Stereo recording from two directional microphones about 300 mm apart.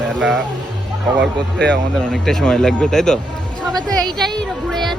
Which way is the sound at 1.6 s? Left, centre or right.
Centre.